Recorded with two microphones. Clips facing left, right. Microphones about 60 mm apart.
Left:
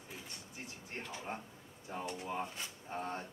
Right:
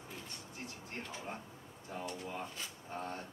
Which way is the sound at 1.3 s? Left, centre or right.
Left.